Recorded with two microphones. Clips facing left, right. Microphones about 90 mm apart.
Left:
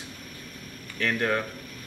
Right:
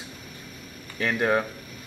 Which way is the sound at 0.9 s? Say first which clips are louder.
Right 3 dB; 15° right (ahead or behind).